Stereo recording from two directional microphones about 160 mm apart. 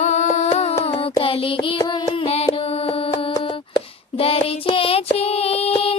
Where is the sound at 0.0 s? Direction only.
45° left (ahead or behind).